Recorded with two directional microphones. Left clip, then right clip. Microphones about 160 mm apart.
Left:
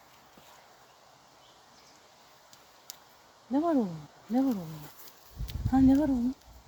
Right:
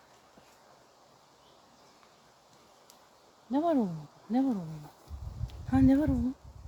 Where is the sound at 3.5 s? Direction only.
10° right (ahead or behind).